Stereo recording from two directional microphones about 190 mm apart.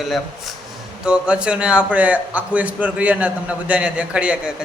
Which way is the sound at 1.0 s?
5° right (ahead or behind).